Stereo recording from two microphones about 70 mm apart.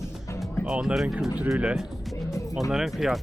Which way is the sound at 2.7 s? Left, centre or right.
Centre.